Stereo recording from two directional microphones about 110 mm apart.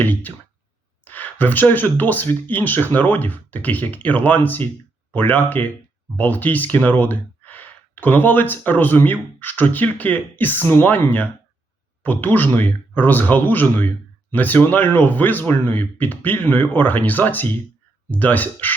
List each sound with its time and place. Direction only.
0.0 s speech: 15° left (ahead or behind)